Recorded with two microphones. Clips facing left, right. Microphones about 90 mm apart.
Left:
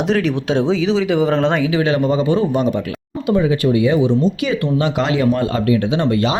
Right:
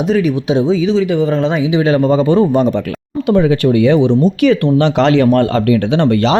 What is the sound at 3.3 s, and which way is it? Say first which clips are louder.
Speech: right 4 dB; 65° right (ahead or behind).